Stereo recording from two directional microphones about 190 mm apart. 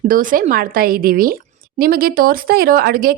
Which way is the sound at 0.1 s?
45° right (ahead or behind).